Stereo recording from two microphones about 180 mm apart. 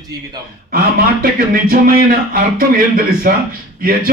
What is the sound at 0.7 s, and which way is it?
Speech, 55° right (ahead or behind).